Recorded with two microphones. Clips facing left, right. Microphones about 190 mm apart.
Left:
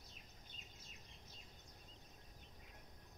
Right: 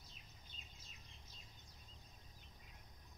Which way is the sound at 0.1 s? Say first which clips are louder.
Left 2 dB; 55° left (ahead or behind).